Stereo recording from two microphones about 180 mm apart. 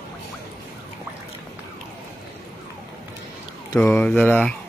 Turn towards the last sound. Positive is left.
turn(degrees=10)  # may be behind; listen again after turning